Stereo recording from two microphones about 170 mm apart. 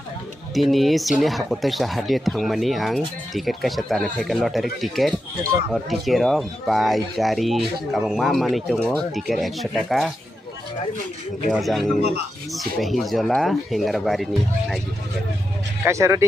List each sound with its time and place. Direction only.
0.6 s speech: centre (ahead or behind)
11.5 s speech: centre (ahead or behind)
15.8 s speech: 15° right (ahead or behind)